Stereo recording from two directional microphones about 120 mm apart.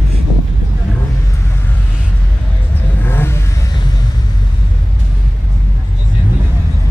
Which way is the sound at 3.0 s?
20° left (ahead or behind).